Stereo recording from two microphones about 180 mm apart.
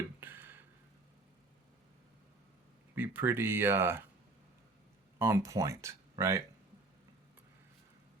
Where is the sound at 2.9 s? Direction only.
10° right (ahead or behind).